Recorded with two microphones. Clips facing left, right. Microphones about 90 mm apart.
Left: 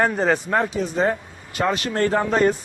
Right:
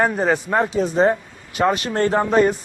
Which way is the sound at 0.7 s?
35° right (ahead or behind).